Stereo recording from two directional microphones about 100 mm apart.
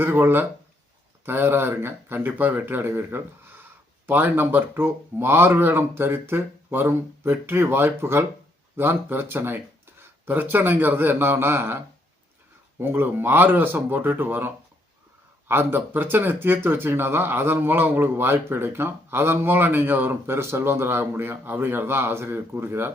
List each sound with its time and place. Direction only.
0.0 s speech: 20° right (ahead or behind)
12.8 s speech: 20° right (ahead or behind)